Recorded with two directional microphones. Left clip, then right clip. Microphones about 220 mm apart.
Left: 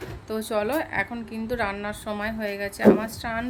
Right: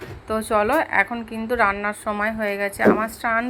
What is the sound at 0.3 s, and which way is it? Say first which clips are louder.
A woman's voice: right 6 dB; centre (ahead or behind).